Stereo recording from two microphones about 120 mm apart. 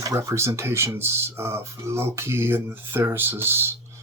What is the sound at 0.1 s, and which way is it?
Speech, 25° right (ahead or behind).